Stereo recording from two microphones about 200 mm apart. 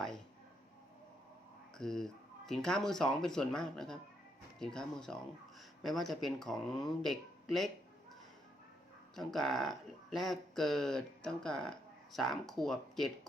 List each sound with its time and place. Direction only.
1.8 s speech: centre (ahead or behind)
9.1 s speech: centre (ahead or behind)